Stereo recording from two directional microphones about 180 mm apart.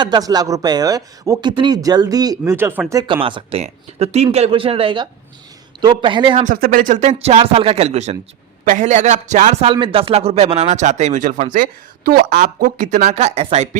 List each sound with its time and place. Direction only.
0.0 s speech: 20° right (ahead or behind)
6.4 s speech: 50° right (ahead or behind)